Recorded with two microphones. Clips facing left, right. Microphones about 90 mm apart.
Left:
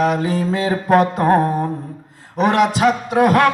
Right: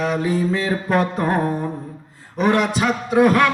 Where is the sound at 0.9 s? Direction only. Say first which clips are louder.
Left 6 dB; 60° left (ahead or behind).